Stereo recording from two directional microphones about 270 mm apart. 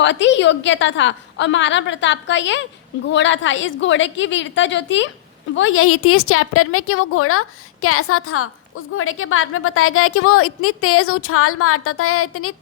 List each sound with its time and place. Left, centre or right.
0.0 s a woman's voice: left